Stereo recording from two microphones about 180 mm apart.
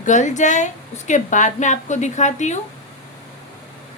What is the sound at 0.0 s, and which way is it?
A woman's voice, 40° left (ahead or behind).